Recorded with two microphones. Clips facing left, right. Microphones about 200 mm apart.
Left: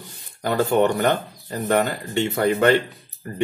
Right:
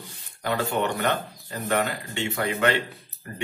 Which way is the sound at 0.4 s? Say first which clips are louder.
Left 7 dB; 35° left (ahead or behind).